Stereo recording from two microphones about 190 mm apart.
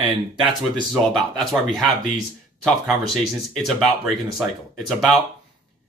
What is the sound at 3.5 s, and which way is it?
Speech, centre (ahead or behind).